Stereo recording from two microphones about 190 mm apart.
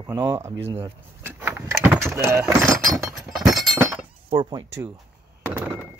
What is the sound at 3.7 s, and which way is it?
Breaking, 15° right (ahead or behind).